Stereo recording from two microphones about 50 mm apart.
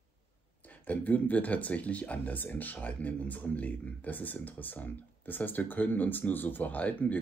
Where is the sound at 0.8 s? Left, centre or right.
Left.